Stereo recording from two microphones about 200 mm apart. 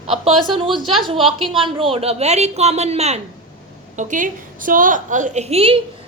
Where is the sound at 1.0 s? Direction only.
25° right (ahead or behind).